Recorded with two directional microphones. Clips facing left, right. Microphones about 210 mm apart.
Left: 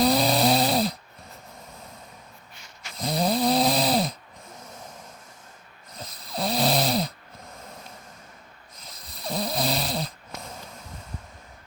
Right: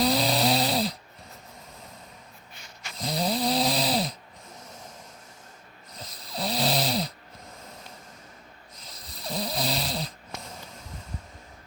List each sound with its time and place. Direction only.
0.0 s snoring: 50° left (ahead or behind)
3.0 s snoring: 55° left (ahead or behind)
6.0 s snoring: 50° left (ahead or behind)
8.7 s snoring: 50° left (ahead or behind)